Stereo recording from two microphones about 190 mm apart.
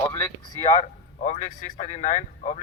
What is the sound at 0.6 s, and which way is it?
A man's voice, 35° left (ahead or behind).